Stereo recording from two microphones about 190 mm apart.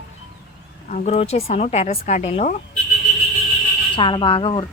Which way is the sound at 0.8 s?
40° left (ahead or behind).